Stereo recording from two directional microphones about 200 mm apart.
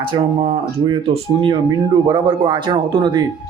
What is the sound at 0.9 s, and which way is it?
Speech, 25° right (ahead or behind).